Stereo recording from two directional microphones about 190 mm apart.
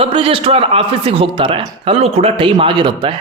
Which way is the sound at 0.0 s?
30° right (ahead or behind).